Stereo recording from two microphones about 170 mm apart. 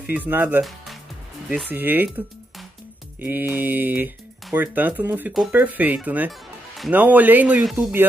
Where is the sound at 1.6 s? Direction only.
10° right (ahead or behind).